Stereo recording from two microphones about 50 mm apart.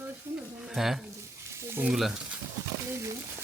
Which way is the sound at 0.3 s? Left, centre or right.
Right.